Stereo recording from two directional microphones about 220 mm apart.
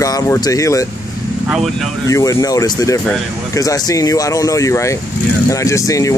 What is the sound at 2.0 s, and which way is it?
Speech, 15° left (ahead or behind).